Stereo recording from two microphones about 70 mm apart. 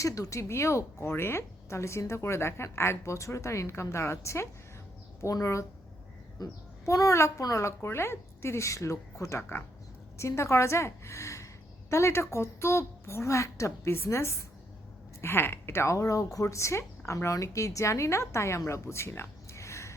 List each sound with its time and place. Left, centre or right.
0.0 s a woman's voice: left
13.9 s a woman's voice: left